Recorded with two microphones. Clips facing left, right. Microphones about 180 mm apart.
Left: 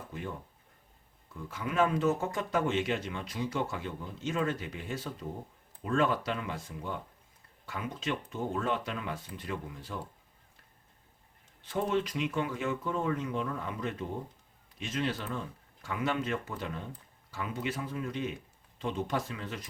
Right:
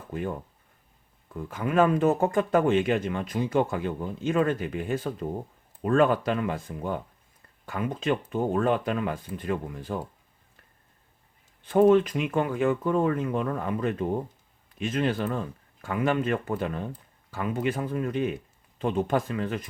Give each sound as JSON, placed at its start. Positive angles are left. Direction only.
{"t": 0.1, "sound": "speech", "side_deg": -55}
{"t": 11.6, "sound": "speech", "side_deg": -55}